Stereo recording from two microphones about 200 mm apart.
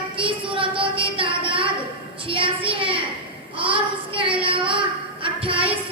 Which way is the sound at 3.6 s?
25° right (ahead or behind).